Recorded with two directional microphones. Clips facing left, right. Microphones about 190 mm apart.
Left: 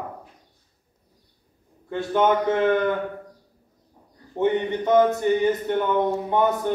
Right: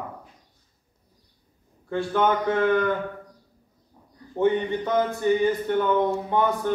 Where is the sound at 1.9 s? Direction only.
20° left (ahead or behind).